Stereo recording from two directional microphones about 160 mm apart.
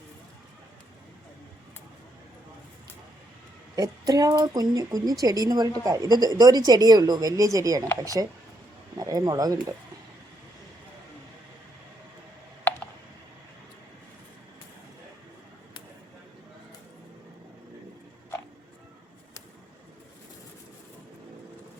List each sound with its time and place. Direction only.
3.8 s a woman's voice: 25° right (ahead or behind)